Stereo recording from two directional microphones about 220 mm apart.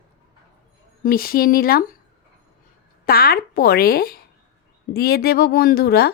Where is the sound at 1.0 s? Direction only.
40° left (ahead or behind).